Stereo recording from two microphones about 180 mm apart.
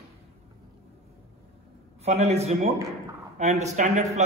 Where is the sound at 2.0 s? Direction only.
35° right (ahead or behind).